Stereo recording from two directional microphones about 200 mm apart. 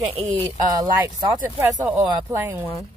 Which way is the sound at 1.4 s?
10° right (ahead or behind).